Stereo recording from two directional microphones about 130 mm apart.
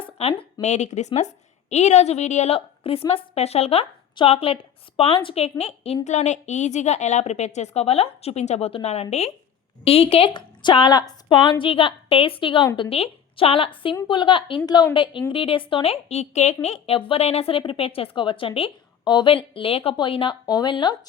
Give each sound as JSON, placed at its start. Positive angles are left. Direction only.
{"t": 0.0, "sound": "a sound", "side_deg": 50}
{"t": 0.6, "sound": "a woman's voice", "side_deg": 60}
{"t": 2.6, "sound": "a woman's voice", "side_deg": 45}
{"t": 6.1, "sound": "a woman's voice", "side_deg": 65}
{"t": 10.3, "sound": "a woman's voice", "side_deg": 35}